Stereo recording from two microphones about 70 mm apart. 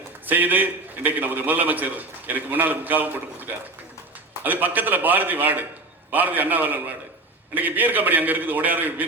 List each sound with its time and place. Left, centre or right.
0.3 s a man's voice: right